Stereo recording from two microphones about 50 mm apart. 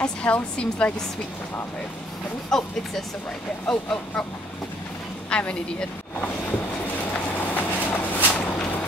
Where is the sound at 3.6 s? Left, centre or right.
Centre.